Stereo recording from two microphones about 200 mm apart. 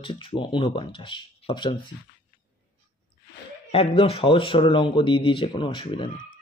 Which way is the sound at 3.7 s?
30° left (ahead or behind).